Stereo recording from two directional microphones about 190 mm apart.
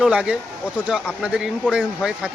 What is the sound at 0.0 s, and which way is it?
Speech, 5° right (ahead or behind).